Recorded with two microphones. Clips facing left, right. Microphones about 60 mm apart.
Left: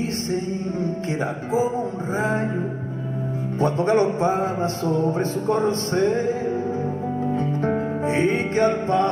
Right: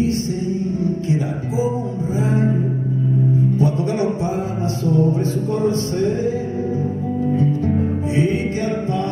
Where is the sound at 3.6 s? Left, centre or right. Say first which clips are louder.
Left 1 dB; left.